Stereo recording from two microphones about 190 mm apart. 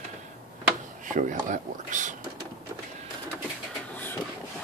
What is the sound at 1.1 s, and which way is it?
Speech, 45° right (ahead or behind).